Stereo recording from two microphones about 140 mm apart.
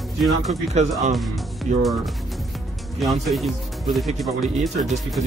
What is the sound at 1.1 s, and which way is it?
Speech, centre (ahead or behind).